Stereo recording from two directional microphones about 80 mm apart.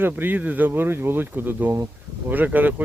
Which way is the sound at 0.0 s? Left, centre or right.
Right.